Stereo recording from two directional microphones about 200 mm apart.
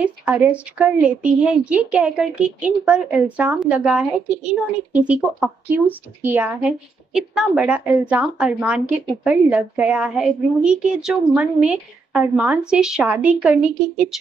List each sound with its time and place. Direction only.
0.0 s a woman's voice: 10° right (ahead or behind)